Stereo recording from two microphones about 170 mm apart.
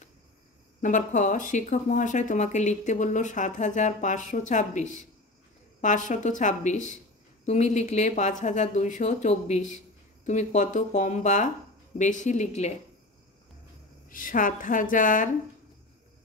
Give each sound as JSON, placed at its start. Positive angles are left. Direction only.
{"t": 0.8, "sound": "speech", "side_deg": 45}
{"t": 14.0, "sound": "speech", "side_deg": 55}